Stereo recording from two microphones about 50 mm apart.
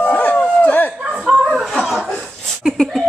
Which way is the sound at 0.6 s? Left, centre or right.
Left.